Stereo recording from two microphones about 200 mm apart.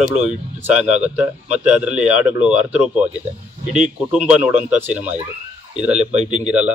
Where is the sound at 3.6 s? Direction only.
35° right (ahead or behind).